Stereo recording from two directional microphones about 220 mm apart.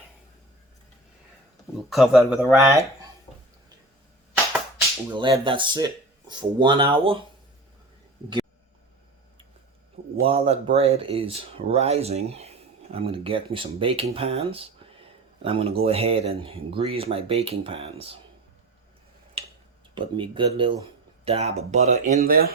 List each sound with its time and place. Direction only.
1.9 s speech: centre (ahead or behind)
2.5 s speech: 15° right (ahead or behind)
3.3 s a sound: 15° left (ahead or behind)
5.1 s speech: 20° right (ahead or behind)
10.2 s speech: 25° right (ahead or behind)
19.4 s a sound: 25° right (ahead or behind)
20.0 s speech: 20° right (ahead or behind); by 22.4 s 40° right (ahead or behind)